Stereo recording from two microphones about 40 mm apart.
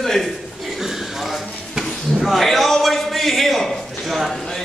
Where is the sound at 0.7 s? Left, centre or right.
Centre.